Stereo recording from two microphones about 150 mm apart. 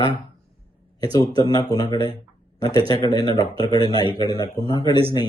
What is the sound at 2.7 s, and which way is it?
Speech, 40° right (ahead or behind).